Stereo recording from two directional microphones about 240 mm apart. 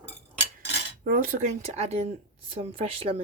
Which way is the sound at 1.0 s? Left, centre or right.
Right.